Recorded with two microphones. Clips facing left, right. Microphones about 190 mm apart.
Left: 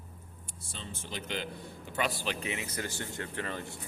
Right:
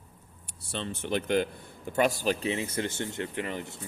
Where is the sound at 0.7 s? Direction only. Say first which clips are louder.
Right 12 dB; 70° right (ahead or behind).